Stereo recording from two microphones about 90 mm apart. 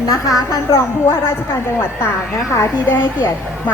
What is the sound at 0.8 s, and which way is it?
A woman's voice, 25° left (ahead or behind).